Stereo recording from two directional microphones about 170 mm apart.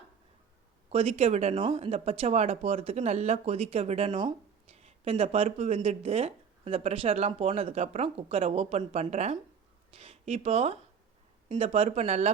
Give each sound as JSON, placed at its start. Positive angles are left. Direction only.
{"t": 0.9, "sound": "speech", "side_deg": -35}